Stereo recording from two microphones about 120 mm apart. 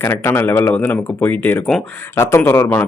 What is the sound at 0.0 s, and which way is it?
A man's voice, 20° left (ahead or behind).